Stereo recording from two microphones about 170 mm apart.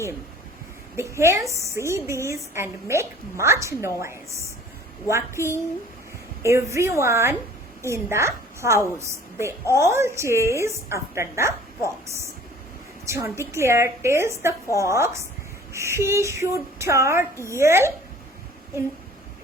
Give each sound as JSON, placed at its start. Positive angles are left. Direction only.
{"t": 0.9, "sound": "a woman's voice", "side_deg": -15}
{"t": 13.1, "sound": "a woman's voice", "side_deg": -15}